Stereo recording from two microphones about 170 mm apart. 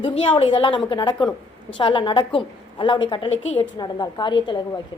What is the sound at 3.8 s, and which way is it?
A woman's voice, 25° left (ahead or behind).